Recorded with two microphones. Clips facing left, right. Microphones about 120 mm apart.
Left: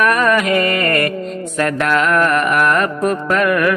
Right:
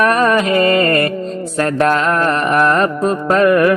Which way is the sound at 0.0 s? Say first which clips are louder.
Right 2 dB; 30° right (ahead or behind).